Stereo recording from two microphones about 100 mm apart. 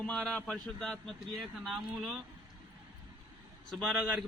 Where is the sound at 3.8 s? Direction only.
10° right (ahead or behind).